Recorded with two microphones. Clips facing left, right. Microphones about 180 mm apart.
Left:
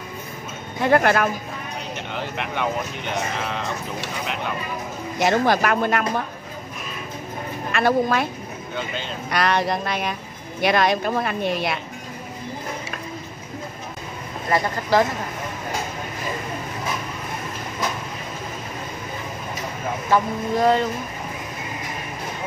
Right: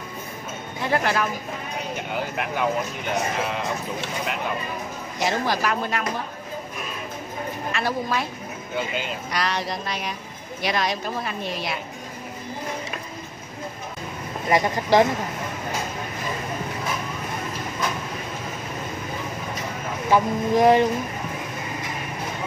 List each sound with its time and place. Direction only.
0.8 s speech: 55° left (ahead or behind)
2.0 s speech: 5° right (ahead or behind)
5.2 s speech: 60° left (ahead or behind)
7.7 s speech: 60° left (ahead or behind)
8.7 s speech: 5° right (ahead or behind)
9.3 s speech: 55° left (ahead or behind)
14.5 s speech: 15° right (ahead or behind)
20.1 s speech: 15° right (ahead or behind)